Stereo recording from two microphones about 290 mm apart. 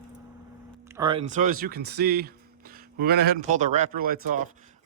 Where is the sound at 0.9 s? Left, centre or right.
Centre.